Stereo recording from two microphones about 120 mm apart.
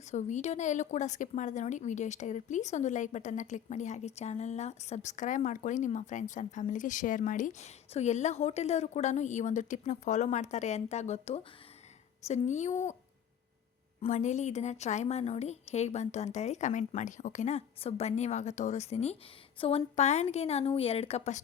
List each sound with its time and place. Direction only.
0.1 s a woman's voice: 80° left
14.1 s a woman's voice: 85° left; by 21.4 s 65° left (ahead or behind)